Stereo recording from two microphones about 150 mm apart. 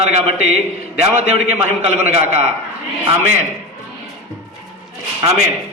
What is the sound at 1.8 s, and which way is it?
Speech, 45° right (ahead or behind).